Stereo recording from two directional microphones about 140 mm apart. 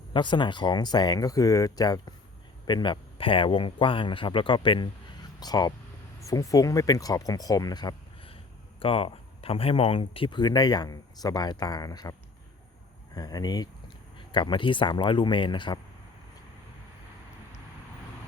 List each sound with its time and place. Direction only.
0.1 s speech: 35° left (ahead or behind)
13.1 s speech: 30° left (ahead or behind)